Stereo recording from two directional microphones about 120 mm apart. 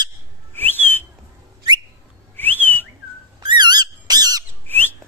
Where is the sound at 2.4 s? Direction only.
15° left (ahead or behind).